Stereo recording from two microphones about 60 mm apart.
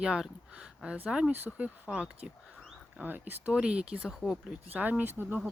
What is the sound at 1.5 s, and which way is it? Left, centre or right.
Speech, centre.